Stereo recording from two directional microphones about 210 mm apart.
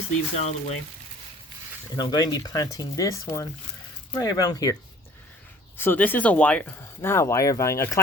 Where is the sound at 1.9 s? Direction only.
20° left (ahead or behind).